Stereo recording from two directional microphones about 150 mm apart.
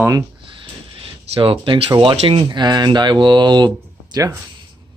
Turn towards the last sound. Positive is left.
turn(degrees=-25)  # may be behind; listen again after turning